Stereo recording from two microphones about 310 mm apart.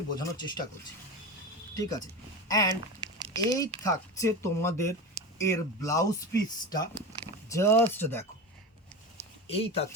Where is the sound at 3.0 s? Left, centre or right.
Centre.